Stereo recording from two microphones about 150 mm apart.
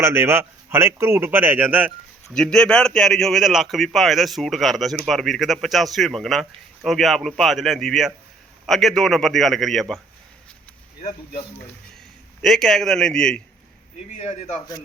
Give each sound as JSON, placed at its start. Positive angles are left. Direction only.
{"t": 0.0, "sound": "a man's voice", "side_deg": -15}
{"t": 2.3, "sound": "speech", "side_deg": 5}
{"t": 12.4, "sound": "speech", "side_deg": 0}
{"t": 14.2, "sound": "speech", "side_deg": 45}